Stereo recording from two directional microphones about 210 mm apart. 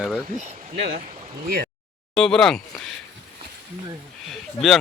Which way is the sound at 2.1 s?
5° left (ahead or behind).